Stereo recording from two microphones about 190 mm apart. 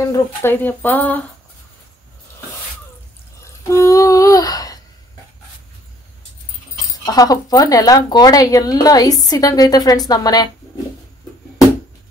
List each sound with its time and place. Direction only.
0.1 s speech: 10° left (ahead or behind)
3.6 s humming: 15° left (ahead or behind)
6.9 s speech: 20° left (ahead or behind)